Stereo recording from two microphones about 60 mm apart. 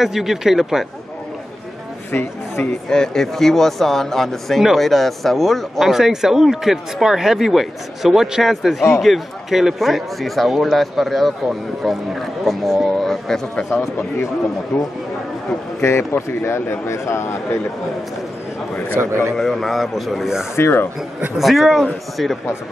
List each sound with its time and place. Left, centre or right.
0.0 s speech: centre
2.1 s speech: left
2.9 s speech: centre
15.8 s speech: left
18.9 s a man's voice: right
19.3 s speech: centre
20.5 s speech: left
21.4 s speech: centre